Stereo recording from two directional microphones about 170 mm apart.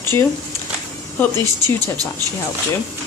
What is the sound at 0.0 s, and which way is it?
Speech, 15° left (ahead or behind).